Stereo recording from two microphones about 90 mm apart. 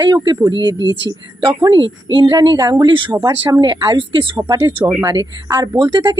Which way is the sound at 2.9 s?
70° right (ahead or behind).